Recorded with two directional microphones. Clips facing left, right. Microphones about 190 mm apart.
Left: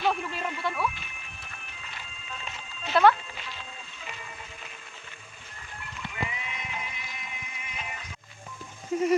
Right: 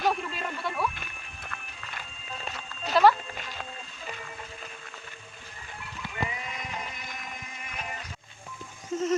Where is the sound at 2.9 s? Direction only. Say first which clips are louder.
Even; 5° right (ahead or behind).